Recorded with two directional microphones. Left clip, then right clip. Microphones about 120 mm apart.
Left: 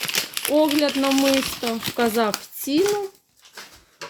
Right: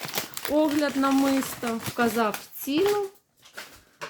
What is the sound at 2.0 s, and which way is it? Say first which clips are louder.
Speech: left 3 dB; 45° left (ahead or behind).